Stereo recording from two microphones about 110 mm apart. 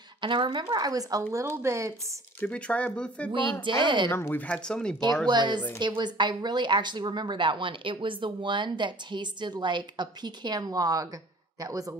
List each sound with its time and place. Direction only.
0.2 s speech: 45° right (ahead or behind)
1.3 s speech: 25° right (ahead or behind)
2.4 s speech: 10° left (ahead or behind)
3.3 s speech: 50° right (ahead or behind)
4.1 s speech: 20° left (ahead or behind)
5.3 s speech: 45° right (ahead or behind)